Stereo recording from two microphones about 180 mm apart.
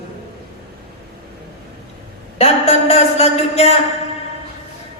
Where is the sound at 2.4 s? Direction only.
35° left (ahead or behind).